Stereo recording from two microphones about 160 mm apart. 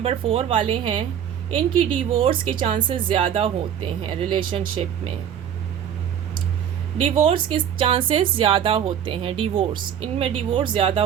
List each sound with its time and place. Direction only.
0.0 s speech: 35° right (ahead or behind)
7.0 s speech: 35° right (ahead or behind)